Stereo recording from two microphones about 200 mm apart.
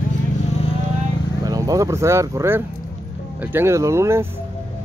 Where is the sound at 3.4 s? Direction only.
10° right (ahead or behind).